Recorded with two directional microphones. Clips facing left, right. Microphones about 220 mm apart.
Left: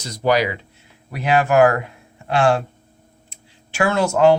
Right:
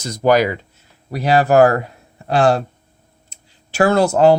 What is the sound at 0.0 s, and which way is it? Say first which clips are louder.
Speech: right 4 dB; 50° right (ahead or behind).